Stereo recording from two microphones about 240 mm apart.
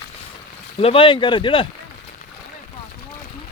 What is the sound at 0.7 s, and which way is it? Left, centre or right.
Speech, left.